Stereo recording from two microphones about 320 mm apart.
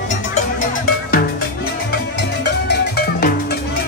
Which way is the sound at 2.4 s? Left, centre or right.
Left.